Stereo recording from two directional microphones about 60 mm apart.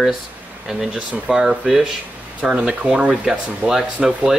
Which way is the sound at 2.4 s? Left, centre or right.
Centre.